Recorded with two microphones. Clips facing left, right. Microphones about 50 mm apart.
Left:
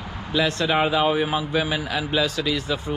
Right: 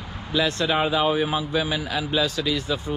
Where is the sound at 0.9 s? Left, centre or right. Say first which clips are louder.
Left 1 dB; left.